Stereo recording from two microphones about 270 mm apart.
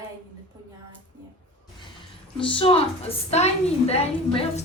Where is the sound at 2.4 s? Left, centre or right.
Centre.